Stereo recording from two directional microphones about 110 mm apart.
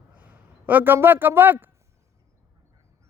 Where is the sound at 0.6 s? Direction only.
15° right (ahead or behind).